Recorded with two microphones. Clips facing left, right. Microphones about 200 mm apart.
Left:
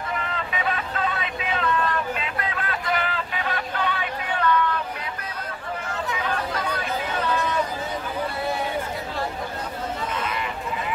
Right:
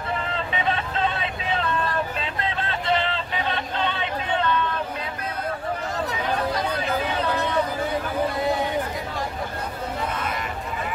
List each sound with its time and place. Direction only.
0.3 s vehicle: 30° right (ahead or behind)
5.9 s chatter: 35° right (ahead or behind)